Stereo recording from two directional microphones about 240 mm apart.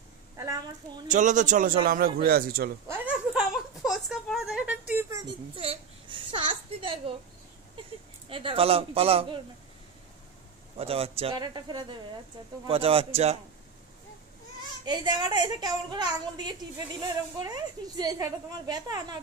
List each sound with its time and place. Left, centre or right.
1.0 s a man's voice: right
2.9 s a sound: centre; by 7.0 s right
8.3 s a man's voice: right
10.8 s a man's voice: right
14.9 s a woman's voice: centre